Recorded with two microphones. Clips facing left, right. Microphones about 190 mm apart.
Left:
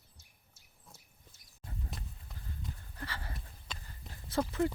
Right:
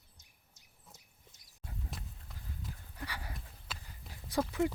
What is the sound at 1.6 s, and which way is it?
Horse, centre (ahead or behind).